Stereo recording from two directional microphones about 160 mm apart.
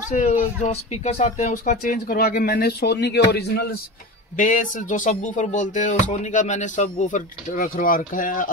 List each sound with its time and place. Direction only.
0.1 s speech: 50° left (ahead or behind); by 3.7 s 90° left
4.4 s speech: 55° left (ahead or behind)